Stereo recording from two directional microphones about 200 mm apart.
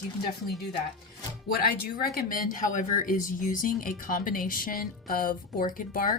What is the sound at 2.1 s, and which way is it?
Speech, 45° left (ahead or behind).